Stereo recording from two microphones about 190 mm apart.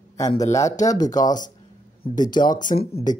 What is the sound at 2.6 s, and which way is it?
Speech, 45° left (ahead or behind).